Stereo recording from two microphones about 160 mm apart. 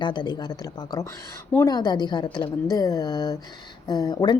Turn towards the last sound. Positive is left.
turn(degrees=25)  # may be behind; listen again after turning